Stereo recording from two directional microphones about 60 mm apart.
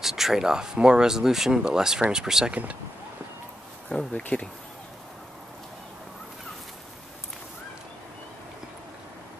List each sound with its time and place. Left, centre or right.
0.0 s speech: centre
2.5 s speech: right
4.1 s speech: left